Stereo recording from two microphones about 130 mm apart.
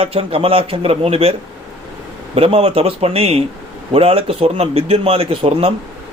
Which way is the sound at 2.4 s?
45° right (ahead or behind).